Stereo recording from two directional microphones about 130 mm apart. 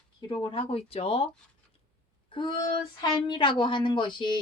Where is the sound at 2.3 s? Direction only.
35° left (ahead or behind).